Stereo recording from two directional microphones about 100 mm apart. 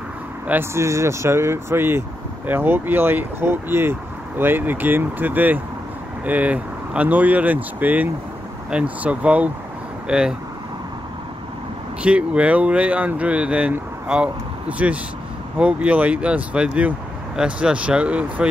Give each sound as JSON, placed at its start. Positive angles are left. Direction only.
{"t": 0.5, "sound": "speech", "side_deg": -25}
{"t": 12.0, "sound": "speech", "side_deg": -10}